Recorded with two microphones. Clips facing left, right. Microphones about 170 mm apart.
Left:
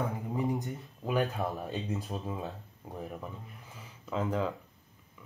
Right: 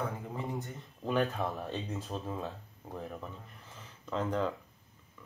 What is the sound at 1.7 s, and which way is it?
Speech, 15° left (ahead or behind).